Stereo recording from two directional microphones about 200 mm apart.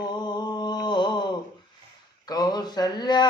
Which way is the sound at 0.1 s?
20° left (ahead or behind).